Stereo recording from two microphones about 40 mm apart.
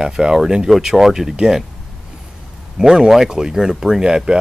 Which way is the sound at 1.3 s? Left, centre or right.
Right.